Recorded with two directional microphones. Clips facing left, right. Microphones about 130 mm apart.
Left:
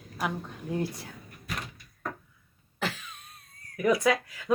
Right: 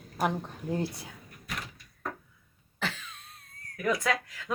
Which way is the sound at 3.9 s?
25° left (ahead or behind).